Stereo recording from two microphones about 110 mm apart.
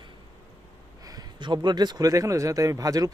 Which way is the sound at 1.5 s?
40° right (ahead or behind).